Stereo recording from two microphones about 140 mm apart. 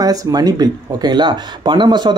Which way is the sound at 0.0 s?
25° right (ahead or behind).